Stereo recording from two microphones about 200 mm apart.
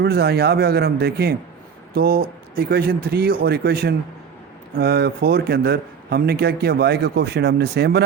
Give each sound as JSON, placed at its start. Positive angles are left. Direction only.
{"t": 0.0, "sound": "a man's voice", "side_deg": -55}